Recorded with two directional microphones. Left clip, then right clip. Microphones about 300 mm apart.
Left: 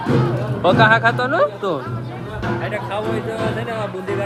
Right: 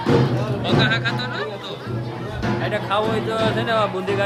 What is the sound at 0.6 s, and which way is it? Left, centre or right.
Speech, centre.